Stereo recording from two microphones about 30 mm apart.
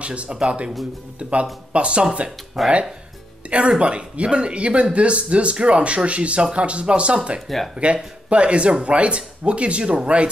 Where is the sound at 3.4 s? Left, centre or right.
Right.